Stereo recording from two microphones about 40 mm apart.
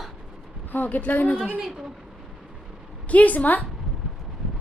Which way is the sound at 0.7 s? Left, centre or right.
Left.